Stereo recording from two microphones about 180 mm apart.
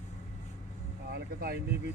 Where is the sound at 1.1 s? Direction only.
60° right (ahead or behind).